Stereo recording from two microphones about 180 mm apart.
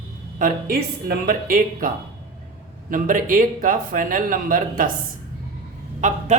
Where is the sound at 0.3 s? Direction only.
50° right (ahead or behind).